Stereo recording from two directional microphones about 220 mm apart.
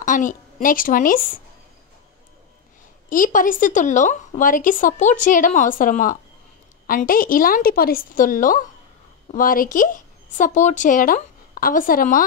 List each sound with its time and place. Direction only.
0.0 s a woman's voice: 35° left (ahead or behind)
3.1 s speech: 40° left (ahead or behind)